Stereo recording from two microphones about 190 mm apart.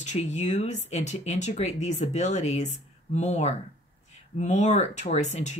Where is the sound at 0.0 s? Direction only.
40° left (ahead or behind).